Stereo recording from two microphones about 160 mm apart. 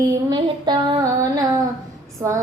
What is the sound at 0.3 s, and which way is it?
Child singing, 25° right (ahead or behind).